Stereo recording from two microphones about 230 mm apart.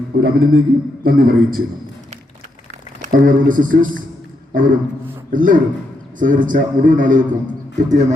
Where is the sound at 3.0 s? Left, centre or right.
Right.